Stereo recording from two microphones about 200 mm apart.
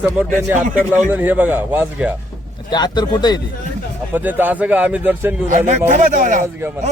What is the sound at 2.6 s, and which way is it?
Speech, 20° left (ahead or behind).